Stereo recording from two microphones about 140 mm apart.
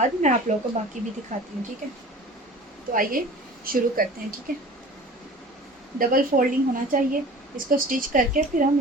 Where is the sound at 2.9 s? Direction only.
80° right.